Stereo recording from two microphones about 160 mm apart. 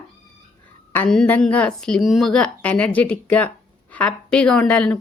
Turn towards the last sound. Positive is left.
turn(degrees=5)  # may be behind; listen again after turning